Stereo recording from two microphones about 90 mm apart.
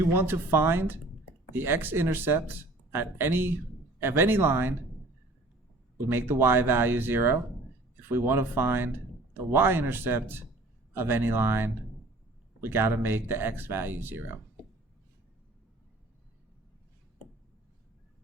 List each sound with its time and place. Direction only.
0.0 s speech: 25° right (ahead or behind)
6.1 s speech: 25° right (ahead or behind)